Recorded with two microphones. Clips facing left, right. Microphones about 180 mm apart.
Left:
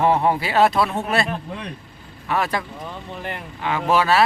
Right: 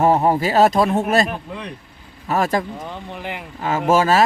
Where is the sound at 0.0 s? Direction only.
40° right (ahead or behind).